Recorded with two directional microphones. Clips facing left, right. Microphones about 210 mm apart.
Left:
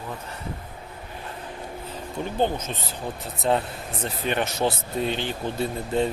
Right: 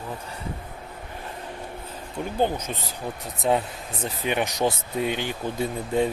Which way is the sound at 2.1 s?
10° right (ahead or behind).